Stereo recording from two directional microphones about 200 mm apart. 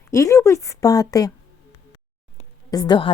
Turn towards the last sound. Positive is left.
turn(degrees=20)  # may be behind; listen again after turning